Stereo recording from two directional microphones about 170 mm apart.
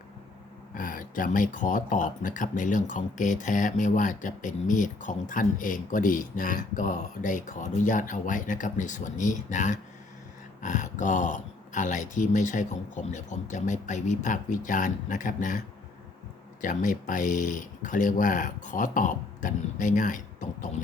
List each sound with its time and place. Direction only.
0.7 s speech: 55° left (ahead or behind)